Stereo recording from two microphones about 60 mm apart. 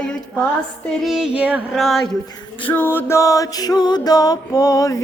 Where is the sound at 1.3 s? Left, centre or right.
Right.